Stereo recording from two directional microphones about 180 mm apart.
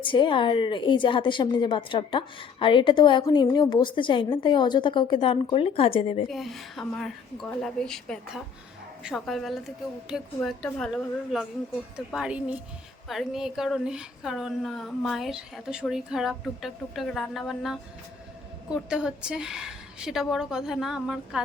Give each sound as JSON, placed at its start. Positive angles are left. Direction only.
{"t": 0.0, "sound": "a woman's voice", "side_deg": 25}
{"t": 6.2, "sound": "a woman's voice", "side_deg": 0}